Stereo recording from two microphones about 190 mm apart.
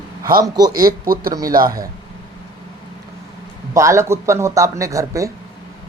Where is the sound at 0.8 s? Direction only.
50° right (ahead or behind).